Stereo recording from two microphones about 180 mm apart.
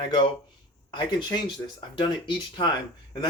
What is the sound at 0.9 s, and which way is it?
Speech, 25° left (ahead or behind).